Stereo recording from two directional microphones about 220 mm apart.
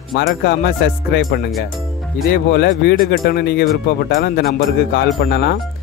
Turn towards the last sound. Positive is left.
turn(degrees=45)  # may be behind; listen again after turning